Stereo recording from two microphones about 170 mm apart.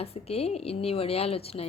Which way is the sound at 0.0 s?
35° left (ahead or behind).